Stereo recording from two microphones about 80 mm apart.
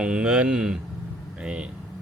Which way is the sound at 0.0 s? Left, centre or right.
Centre.